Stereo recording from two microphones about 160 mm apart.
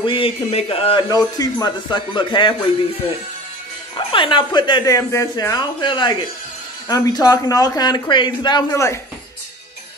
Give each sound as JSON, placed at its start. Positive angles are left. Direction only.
{"t": 0.0, "sound": "a man's voice", "side_deg": 35}
{"t": 4.1, "sound": "speech", "side_deg": 30}